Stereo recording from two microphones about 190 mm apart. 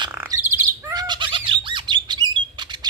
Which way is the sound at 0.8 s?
20° right (ahead or behind).